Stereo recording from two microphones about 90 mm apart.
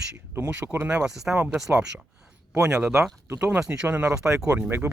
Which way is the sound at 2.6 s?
10° right (ahead or behind).